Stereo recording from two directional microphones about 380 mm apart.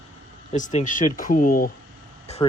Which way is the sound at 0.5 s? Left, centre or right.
Centre.